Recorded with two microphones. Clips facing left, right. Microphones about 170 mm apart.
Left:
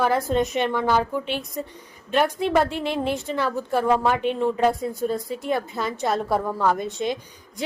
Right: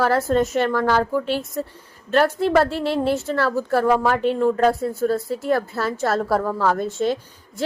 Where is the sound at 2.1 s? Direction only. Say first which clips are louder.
Right 3 dB; 15° left (ahead or behind).